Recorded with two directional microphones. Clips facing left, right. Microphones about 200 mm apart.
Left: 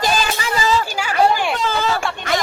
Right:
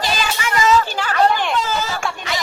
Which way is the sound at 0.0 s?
40° left (ahead or behind).